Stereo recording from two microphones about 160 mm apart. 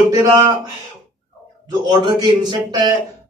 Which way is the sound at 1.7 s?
25° right (ahead or behind).